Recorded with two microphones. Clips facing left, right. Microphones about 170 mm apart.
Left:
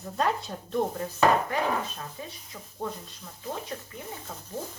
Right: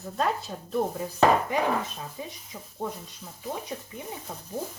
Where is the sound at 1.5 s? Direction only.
15° right (ahead or behind).